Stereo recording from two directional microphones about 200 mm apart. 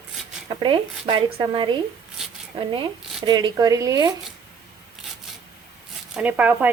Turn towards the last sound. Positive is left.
turn(degrees=-10)  # may be behind; listen again after turning